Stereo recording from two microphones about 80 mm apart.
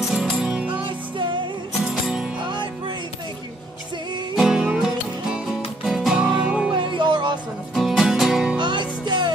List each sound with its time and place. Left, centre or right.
0.1 s music: centre
0.8 s music: right
1.9 s music: centre
4.4 s music: centre
6.7 s music: right
7.7 s music: centre
8.5 s music: right